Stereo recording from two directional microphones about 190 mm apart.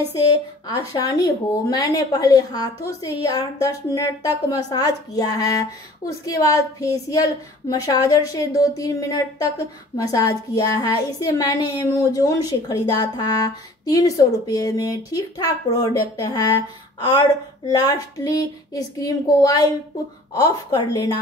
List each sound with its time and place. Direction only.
0.7 s a woman's voice: 20° left (ahead or behind)